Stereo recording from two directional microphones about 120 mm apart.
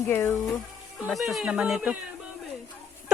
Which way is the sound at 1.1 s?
Centre (ahead or behind).